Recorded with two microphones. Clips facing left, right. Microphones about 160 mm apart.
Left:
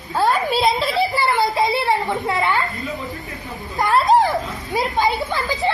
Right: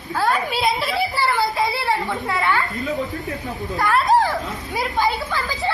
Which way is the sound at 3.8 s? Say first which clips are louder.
Left 2 dB; 25° left (ahead or behind).